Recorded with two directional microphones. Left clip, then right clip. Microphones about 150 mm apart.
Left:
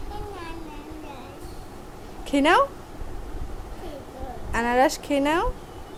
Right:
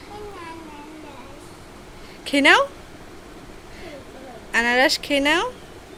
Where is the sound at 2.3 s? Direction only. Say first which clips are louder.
Right 4 dB; 5° left (ahead or behind).